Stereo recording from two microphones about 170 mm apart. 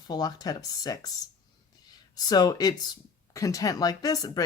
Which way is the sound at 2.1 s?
25° left (ahead or behind).